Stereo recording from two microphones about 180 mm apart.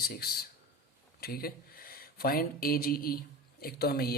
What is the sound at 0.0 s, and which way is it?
Speech, 60° left (ahead or behind).